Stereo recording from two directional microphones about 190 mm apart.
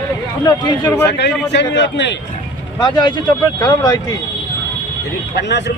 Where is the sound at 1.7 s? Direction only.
65° left (ahead or behind).